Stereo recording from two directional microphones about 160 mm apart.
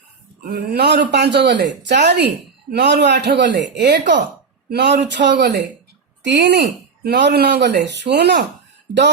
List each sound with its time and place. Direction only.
0.4 s speech: 85° right